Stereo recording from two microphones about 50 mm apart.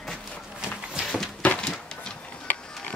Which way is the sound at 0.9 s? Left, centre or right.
Centre.